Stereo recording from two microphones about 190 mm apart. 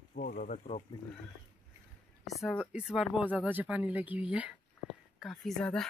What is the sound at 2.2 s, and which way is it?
Speech, centre (ahead or behind).